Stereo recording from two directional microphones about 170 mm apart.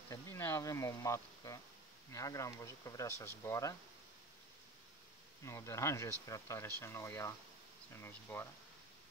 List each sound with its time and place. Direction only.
0.1 s bee: 15° left (ahead or behind)
2.1 s speech: 20° left (ahead or behind)
5.4 s speech: 15° left (ahead or behind)